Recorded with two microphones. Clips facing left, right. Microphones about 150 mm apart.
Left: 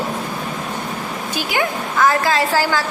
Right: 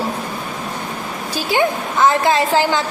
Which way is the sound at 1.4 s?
30° right (ahead or behind).